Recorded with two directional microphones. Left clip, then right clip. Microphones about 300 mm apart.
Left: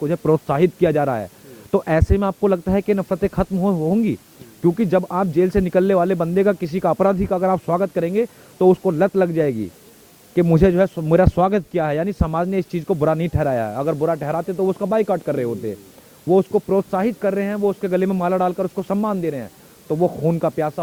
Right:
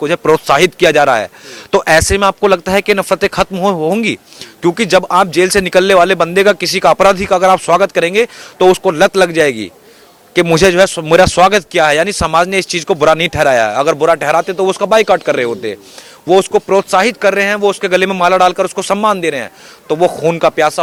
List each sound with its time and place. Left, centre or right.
0.0 s speech: centre
16.6 s speech: centre
19.9 s a man's voice: right
20.2 s speech: centre